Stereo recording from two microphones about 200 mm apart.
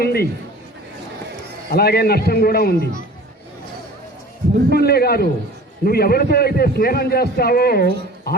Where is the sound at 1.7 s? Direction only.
50° left (ahead or behind).